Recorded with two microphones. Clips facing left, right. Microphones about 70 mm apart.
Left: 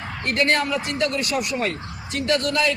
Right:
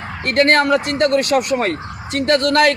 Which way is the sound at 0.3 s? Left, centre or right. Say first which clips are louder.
Right 8 dB; right.